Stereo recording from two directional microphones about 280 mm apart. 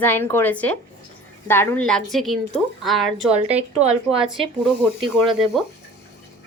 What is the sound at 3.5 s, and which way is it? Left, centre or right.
Speech, right.